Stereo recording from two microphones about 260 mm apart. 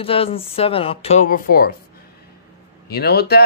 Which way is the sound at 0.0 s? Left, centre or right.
Left.